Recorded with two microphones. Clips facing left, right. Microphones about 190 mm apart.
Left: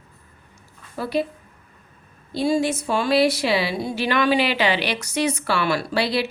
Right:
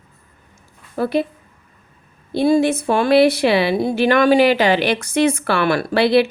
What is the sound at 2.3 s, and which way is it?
A woman's voice, 55° right (ahead or behind).